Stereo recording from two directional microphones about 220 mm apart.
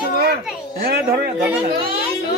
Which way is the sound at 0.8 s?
45° right (ahead or behind).